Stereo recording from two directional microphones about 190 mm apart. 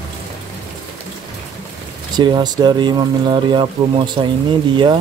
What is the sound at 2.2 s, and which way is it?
Speech, 25° right (ahead or behind).